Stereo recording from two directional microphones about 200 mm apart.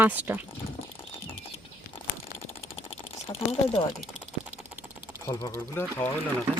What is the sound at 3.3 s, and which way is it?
Speech, 25° left (ahead or behind).